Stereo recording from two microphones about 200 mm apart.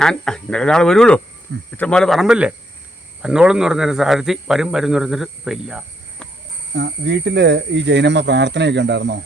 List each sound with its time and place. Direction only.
0.0 s speech: 5° left (ahead or behind)
6.7 s speech: 60° right (ahead or behind)